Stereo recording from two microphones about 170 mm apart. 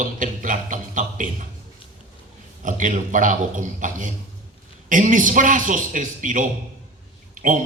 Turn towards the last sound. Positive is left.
turn(degrees=-50)  # may be behind; listen again after turning